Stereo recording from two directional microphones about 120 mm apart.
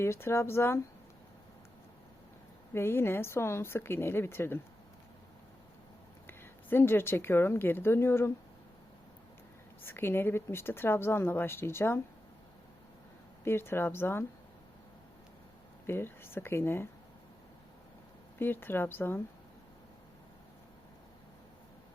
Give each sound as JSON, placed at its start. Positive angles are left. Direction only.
{"t": 0.0, "sound": "speech", "side_deg": 20}
{"t": 2.7, "sound": "speech", "side_deg": 20}
{"t": 6.2, "sound": "a woman's voice", "side_deg": 20}
{"t": 9.8, "sound": "speech", "side_deg": 20}
{"t": 13.4, "sound": "speech", "side_deg": 20}
{"t": 15.9, "sound": "speech", "side_deg": 20}
{"t": 18.3, "sound": "speech", "side_deg": 20}